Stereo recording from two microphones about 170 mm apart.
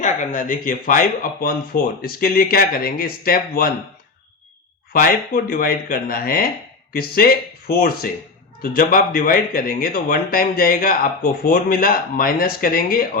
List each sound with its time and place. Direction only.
0.0 s speech: 45° left (ahead or behind)
4.9 s speech: 55° left (ahead or behind)